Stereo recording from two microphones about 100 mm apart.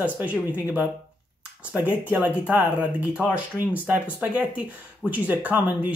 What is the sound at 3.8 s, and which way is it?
Speech, 15° right (ahead or behind).